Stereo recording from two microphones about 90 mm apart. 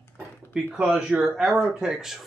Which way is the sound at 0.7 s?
10° right (ahead or behind).